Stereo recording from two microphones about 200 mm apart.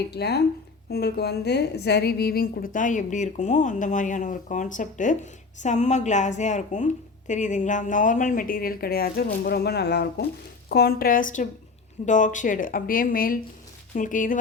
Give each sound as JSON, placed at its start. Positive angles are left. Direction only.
{"t": 0.1, "sound": "a woman's voice", "side_deg": 55}